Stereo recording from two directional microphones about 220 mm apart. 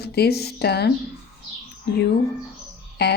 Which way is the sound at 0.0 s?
45° left (ahead or behind).